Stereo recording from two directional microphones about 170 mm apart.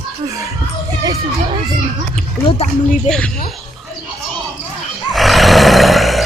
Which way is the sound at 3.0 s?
5° left (ahead or behind).